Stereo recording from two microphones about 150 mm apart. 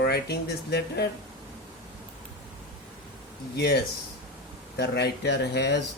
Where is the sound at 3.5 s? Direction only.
90° left.